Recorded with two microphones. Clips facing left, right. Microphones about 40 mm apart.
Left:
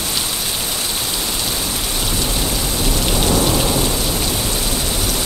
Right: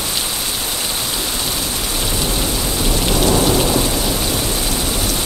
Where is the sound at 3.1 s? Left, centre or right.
Centre.